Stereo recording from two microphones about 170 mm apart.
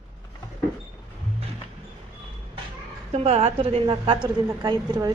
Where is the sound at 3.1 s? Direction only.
40° right (ahead or behind).